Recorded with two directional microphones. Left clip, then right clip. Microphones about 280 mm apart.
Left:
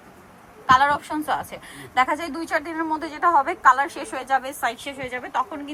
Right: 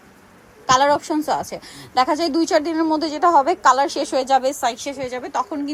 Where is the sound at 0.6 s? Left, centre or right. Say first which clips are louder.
Right 1 dB; right.